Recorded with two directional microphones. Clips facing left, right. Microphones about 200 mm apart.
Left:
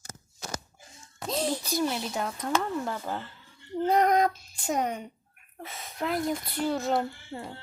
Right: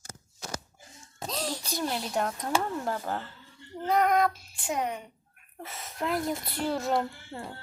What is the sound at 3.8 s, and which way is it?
Speech, 35° left (ahead or behind).